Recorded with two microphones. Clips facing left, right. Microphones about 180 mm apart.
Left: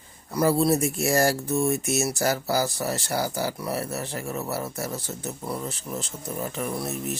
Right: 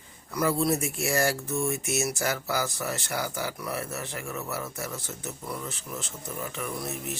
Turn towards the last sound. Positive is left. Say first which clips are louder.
# left 4 dB
turn(degrees=35)  # may be behind; listen again after turning